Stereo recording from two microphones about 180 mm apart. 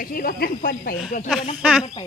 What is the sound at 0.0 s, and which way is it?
Speech, 55° left (ahead or behind).